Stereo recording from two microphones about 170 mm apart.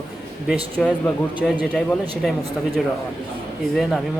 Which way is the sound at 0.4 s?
5° left (ahead or behind).